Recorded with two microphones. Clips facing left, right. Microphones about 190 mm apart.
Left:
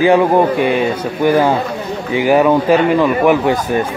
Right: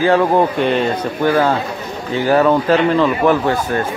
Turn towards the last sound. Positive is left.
turn(degrees=15)  # may be behind; listen again after turning